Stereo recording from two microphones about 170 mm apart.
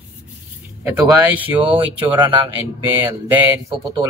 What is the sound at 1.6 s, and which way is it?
Speech, 30° right (ahead or behind).